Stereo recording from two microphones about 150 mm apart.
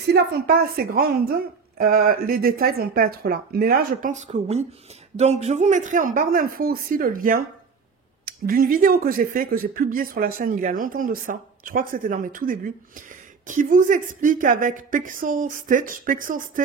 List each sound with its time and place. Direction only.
0.1 s a woman's voice: 85° right
1.8 s speech: 75° right (ahead or behind)
4.1 s speech: 50° right (ahead or behind); by 16.6 s 65° right (ahead or behind)